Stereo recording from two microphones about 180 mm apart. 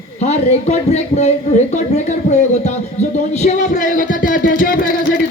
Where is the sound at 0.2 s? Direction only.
40° left (ahead or behind).